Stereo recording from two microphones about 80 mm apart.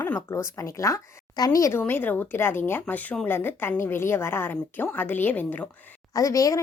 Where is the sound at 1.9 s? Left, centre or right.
Left.